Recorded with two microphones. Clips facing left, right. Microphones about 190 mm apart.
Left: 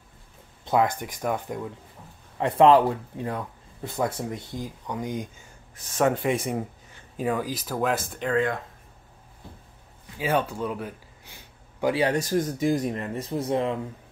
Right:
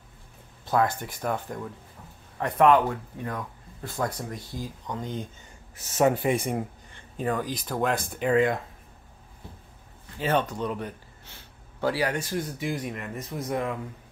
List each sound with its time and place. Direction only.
0.7 s speech: 15° left (ahead or behind)
2.3 s speech: 25° left (ahead or behind)
5.9 s speech: 5° right (ahead or behind)
8.3 s speech: 15° right (ahead or behind)
10.1 s speech: 10° left (ahead or behind)
12.1 s speech: 40° left (ahead or behind)